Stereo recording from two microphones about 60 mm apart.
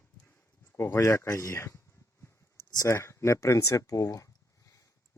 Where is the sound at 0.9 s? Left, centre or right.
Left.